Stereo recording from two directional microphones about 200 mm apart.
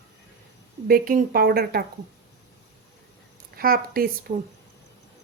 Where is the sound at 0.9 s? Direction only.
45° right (ahead or behind).